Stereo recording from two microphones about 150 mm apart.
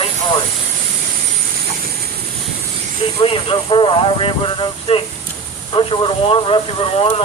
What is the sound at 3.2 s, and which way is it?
Speech, 35° left (ahead or behind).